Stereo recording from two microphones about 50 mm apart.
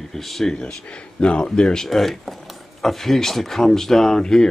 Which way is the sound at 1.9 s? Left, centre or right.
Centre.